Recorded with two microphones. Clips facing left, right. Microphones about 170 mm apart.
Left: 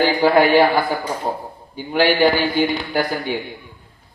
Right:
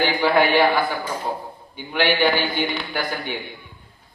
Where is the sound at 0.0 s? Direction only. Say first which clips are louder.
Left 4 dB; 40° left (ahead or behind).